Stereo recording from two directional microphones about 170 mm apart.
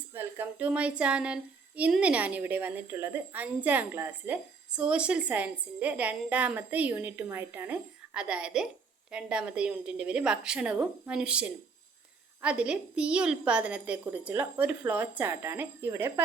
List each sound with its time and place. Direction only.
0.1 s a woman's voice: 10° right (ahead or behind)